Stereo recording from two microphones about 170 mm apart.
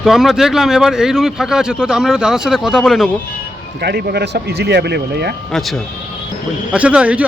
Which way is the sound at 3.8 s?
70° right (ahead or behind).